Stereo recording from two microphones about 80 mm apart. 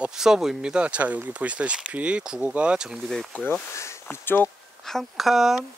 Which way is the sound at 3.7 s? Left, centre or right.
Left.